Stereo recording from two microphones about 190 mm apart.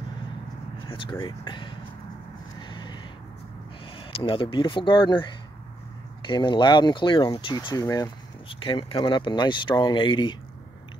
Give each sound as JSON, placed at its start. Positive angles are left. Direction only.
{"t": 0.8, "sound": "vehicle", "side_deg": 25}
{"t": 1.2, "sound": "speech", "side_deg": 25}
{"t": 2.6, "sound": "a sound", "side_deg": 25}
{"t": 3.8, "sound": "speech", "side_deg": 25}